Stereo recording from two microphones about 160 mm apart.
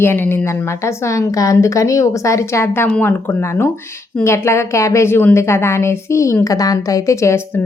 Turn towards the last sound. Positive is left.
turn(degrees=20)  # may be behind; listen again after turning